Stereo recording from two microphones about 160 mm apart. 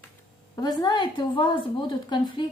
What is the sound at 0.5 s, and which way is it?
Speech, 25° left (ahead or behind).